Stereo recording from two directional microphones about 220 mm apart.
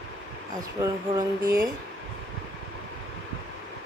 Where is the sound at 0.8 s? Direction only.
15° right (ahead or behind).